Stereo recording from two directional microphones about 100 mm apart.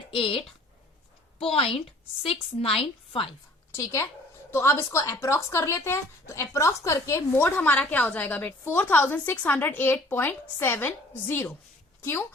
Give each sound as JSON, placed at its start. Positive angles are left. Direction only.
{"t": 0.1, "sound": "a woman's voice", "side_deg": 70}
{"t": 3.8, "sound": "speech", "side_deg": 30}